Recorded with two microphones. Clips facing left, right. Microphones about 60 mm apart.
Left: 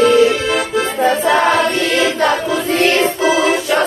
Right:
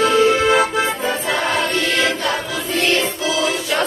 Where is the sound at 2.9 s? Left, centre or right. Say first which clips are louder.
Left 6 dB; left.